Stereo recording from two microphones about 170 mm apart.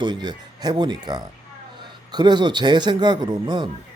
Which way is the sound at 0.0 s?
25° right (ahead or behind).